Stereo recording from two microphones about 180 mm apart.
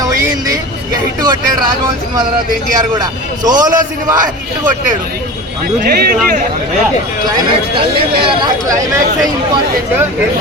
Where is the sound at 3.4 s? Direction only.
20° right (ahead or behind).